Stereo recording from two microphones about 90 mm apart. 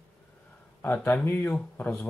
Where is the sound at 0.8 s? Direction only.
20° left (ahead or behind).